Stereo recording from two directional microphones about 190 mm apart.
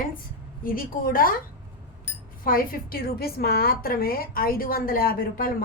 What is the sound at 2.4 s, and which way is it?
A woman's voice, 50° left (ahead or behind).